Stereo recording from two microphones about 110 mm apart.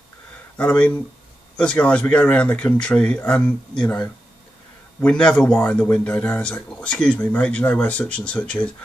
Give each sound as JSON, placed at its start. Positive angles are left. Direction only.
{"t": 0.6, "sound": "speech", "side_deg": 10}
{"t": 5.0, "sound": "speech", "side_deg": 5}